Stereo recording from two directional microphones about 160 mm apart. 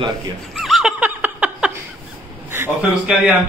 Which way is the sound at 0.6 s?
Centre (ahead or behind).